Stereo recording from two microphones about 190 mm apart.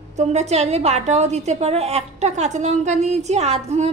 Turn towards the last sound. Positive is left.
turn(degrees=-35)  # may be behind; listen again after turning